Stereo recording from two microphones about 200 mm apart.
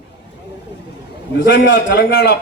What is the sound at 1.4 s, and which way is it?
A man's voice, 60° left (ahead or behind).